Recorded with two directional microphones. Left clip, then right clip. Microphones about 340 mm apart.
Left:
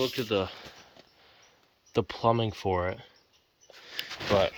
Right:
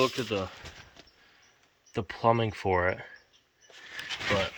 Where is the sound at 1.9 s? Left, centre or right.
Centre.